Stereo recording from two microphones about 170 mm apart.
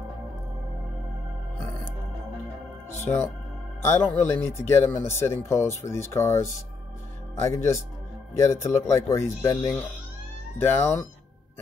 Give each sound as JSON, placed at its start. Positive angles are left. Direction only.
{"t": 3.0, "sound": "speech", "side_deg": 15}
{"t": 10.6, "sound": "speech", "side_deg": 15}